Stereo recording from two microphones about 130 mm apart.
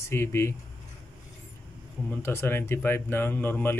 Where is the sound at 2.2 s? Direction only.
20° left (ahead or behind).